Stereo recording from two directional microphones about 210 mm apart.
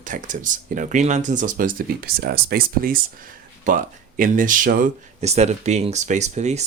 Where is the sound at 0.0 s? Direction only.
40° right (ahead or behind).